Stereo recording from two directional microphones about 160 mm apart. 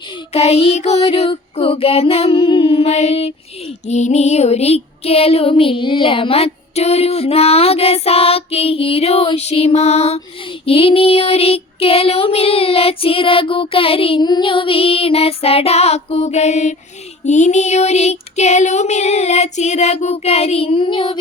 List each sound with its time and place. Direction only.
0.3 s music: 40° left (ahead or behind)
17.2 s female singing: 45° left (ahead or behind); by 21.2 s 30° left (ahead or behind)